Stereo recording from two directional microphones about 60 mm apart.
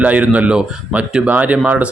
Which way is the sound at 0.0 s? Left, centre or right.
Right.